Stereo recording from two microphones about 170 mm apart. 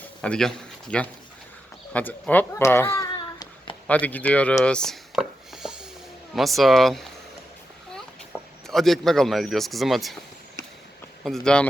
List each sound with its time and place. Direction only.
0.2 s speech: 5° left (ahead or behind)
3.1 s a sound: 25° left (ahead or behind)
3.8 s speech: 10° left (ahead or behind)
8.6 s speech: centre (ahead or behind)
11.2 s speech: 5° left (ahead or behind)